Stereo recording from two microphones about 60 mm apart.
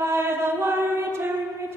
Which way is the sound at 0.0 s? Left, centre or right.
Right.